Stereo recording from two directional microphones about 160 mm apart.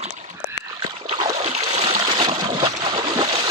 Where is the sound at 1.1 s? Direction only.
35° right (ahead or behind).